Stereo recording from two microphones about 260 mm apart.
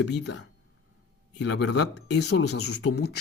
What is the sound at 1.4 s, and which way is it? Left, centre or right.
Speech, left.